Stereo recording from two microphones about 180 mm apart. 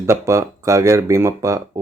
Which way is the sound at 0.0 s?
15° right (ahead or behind).